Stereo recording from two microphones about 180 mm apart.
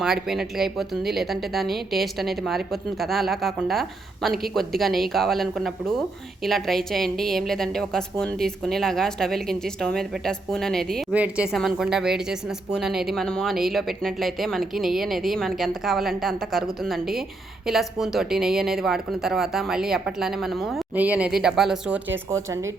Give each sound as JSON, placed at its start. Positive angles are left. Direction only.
{"t": 0.0, "sound": "a woman's voice", "side_deg": 0}